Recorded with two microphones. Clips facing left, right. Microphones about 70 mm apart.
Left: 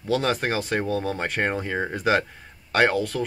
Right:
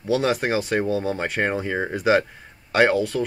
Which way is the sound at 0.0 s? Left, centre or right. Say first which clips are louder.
Right 2 dB; centre.